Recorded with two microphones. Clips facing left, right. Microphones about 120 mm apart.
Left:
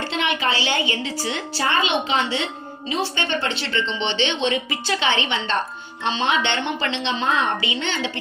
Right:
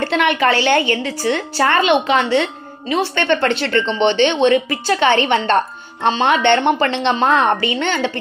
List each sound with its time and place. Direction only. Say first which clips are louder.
0.0 s a woman's voice: right 8 dB; 55° right (ahead or behind)